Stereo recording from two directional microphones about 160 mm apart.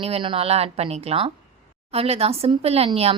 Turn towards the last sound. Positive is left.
turn(degrees=-40)  # may be behind; listen again after turning